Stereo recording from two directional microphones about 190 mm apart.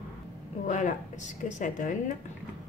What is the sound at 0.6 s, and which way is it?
A woman's voice, 40° left (ahead or behind).